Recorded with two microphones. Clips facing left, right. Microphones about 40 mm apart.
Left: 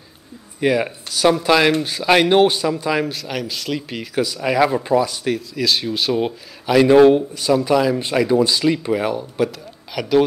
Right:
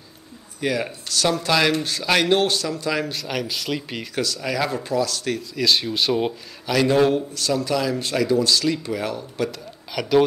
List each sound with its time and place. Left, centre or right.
0.6 s speech: centre
3.1 s speech: centre
4.2 s speech: centre
5.6 s speech: centre
6.6 s speech: centre
9.9 s speech: centre